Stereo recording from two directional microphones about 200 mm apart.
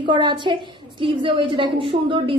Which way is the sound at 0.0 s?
25° right (ahead or behind).